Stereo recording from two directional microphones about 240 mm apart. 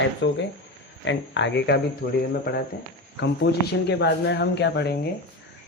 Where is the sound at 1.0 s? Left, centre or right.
Left.